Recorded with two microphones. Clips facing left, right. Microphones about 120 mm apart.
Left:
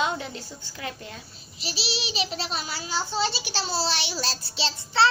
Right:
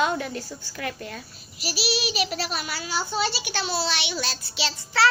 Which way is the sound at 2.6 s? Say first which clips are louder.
Right 1 dB; 60° right (ahead or behind).